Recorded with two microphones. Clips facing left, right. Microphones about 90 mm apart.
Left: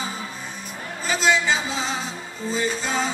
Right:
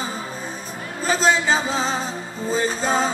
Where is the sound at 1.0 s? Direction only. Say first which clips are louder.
Right 2 dB; 40° right (ahead or behind).